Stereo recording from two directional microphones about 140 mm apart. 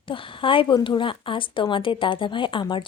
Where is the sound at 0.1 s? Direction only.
40° left (ahead or behind).